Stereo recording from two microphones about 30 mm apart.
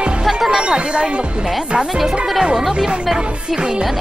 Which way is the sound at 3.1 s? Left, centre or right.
Right.